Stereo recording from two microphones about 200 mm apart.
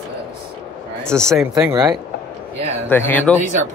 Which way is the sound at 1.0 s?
5° left (ahead or behind).